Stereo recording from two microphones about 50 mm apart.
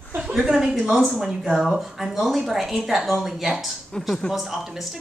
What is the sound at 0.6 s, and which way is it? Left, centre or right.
A woman's voice, centre.